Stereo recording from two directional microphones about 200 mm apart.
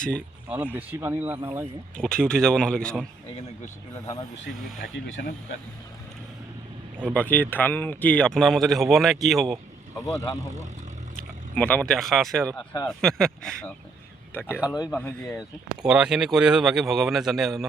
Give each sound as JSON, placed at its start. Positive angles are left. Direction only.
{"t": 0.0, "sound": "speech", "side_deg": 5}
{"t": 0.4, "sound": "speech", "side_deg": -5}
{"t": 2.0, "sound": "speech", "side_deg": 5}
{"t": 4.9, "sound": "speech", "side_deg": 65}
{"t": 7.1, "sound": "speech", "side_deg": 5}
{"t": 11.5, "sound": "speech", "side_deg": 5}
{"t": 14.8, "sound": "speech", "side_deg": 10}
{"t": 15.3, "sound": "speech", "side_deg": -5}